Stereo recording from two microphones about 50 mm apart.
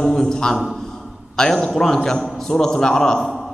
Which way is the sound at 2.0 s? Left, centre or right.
Centre.